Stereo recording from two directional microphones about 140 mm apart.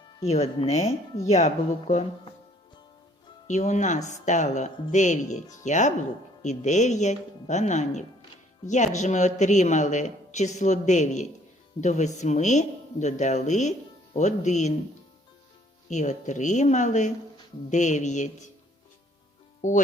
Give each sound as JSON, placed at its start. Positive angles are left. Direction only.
{"t": 0.2, "sound": "speech", "side_deg": 50}
{"t": 3.4, "sound": "speech", "side_deg": 55}
{"t": 15.9, "sound": "speech", "side_deg": 60}
{"t": 19.6, "sound": "speech", "side_deg": 60}